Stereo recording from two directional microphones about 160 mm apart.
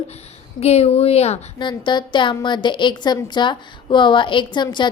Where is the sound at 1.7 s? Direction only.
30° left (ahead or behind).